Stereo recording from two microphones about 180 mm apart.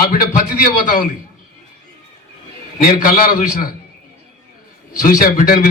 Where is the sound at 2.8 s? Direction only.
50° left (ahead or behind).